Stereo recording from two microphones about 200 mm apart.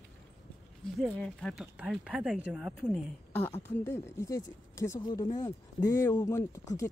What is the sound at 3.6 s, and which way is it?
Speech, 10° left (ahead or behind).